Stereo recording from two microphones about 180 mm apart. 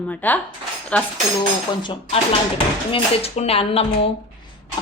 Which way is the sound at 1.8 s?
30° left (ahead or behind).